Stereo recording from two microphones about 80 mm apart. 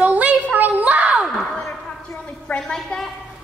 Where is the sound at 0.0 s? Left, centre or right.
Centre.